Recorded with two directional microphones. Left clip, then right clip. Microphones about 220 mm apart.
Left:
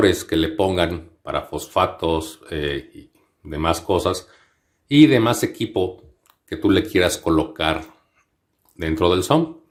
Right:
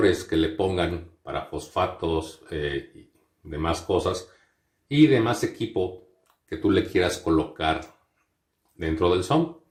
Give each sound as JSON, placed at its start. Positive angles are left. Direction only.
{"t": 0.0, "sound": "speech", "side_deg": 45}
{"t": 8.8, "sound": "speech", "side_deg": 45}